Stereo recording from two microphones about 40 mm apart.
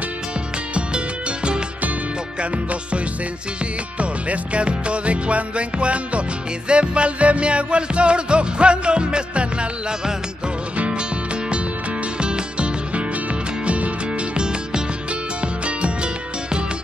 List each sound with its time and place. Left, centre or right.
0.7 s music: right
4.0 s music: right
12.2 s music: right
14.3 s music: right